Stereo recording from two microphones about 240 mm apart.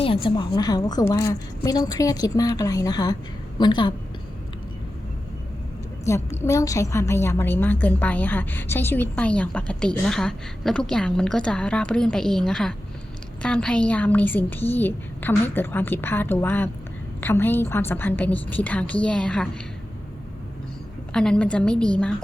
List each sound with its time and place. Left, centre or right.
0.0 s a woman's voice: left
6.1 s a woman's voice: centre
21.1 s a woman's voice: centre